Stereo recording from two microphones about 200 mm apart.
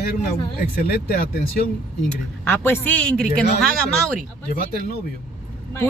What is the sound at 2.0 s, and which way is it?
Speech, 10° left (ahead or behind).